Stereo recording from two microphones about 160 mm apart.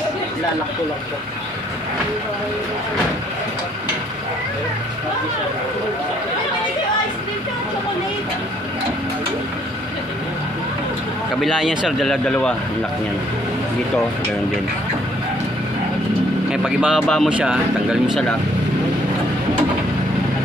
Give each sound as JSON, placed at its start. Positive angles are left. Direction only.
{"t": 11.4, "sound": "speech", "side_deg": -5}
{"t": 16.6, "sound": "speech", "side_deg": -5}